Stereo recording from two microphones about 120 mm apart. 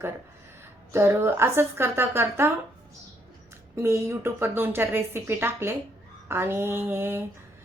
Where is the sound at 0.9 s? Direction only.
20° right (ahead or behind).